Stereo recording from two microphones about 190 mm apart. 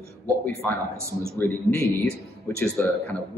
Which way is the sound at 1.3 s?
15° left (ahead or behind).